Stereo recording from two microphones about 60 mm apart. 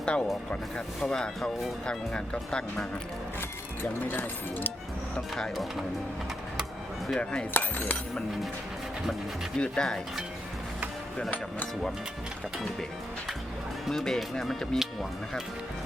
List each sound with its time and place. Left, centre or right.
0.0 s speech: centre
4.1 s speech: left
5.1 s speech: centre
7.2 s speech: centre
7.5 s speech: left
9.6 s speech: centre
13.8 s speech: centre